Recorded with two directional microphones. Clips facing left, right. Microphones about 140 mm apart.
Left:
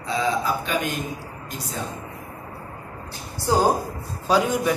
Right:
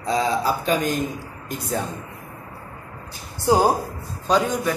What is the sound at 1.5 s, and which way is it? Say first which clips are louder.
Speech: right 7 dB; 55° right (ahead or behind).